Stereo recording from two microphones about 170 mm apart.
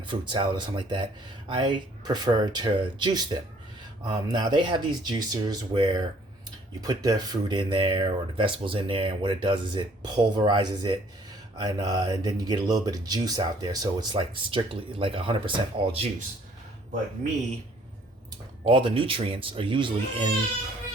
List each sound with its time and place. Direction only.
0.1 s speech: 30° right (ahead or behind)
18.6 s speech: 30° right (ahead or behind)